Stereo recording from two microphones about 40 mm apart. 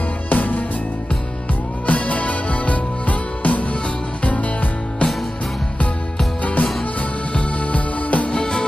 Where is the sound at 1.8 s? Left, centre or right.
Left.